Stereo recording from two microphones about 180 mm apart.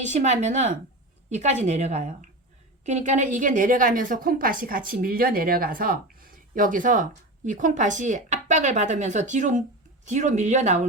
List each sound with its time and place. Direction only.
0.0 s a woman's voice: 40° right (ahead or behind)